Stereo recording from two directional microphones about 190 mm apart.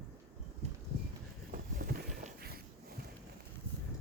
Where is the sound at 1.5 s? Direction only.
50° right (ahead or behind).